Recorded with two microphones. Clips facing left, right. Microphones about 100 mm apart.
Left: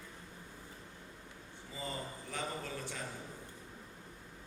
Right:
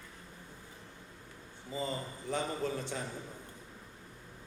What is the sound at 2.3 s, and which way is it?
Speech, 25° right (ahead or behind).